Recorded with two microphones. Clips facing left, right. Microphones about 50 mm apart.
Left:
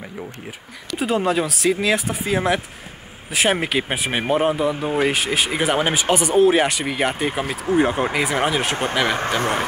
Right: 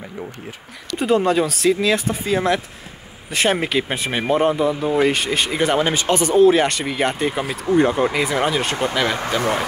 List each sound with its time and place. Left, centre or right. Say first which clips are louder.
0.9 s speech: right 3 dB; centre
1.7 s speech: right 1 dB; centre